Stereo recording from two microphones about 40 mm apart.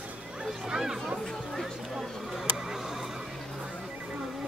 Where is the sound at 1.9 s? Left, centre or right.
Centre.